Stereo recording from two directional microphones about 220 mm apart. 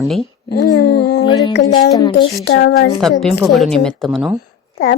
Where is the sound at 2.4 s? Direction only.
50° left (ahead or behind).